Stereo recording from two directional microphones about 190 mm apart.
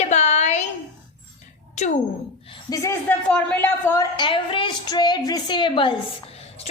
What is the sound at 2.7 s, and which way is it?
A woman's voice, 15° left (ahead or behind).